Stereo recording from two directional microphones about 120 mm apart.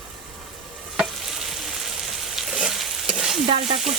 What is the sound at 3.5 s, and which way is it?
Frying, 55° right (ahead or behind).